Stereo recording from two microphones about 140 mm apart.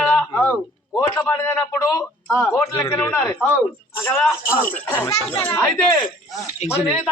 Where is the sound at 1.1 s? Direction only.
15° left (ahead or behind).